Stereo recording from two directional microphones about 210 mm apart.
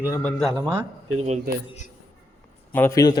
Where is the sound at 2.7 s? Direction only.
15° left (ahead or behind).